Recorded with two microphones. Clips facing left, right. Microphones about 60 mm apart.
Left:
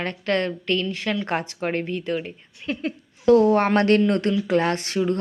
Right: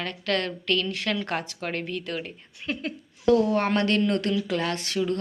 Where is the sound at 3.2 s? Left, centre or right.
Left.